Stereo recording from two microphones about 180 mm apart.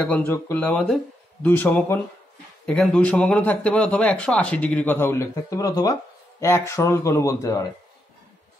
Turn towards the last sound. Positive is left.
turn(degrees=15)  # may be behind; listen again after turning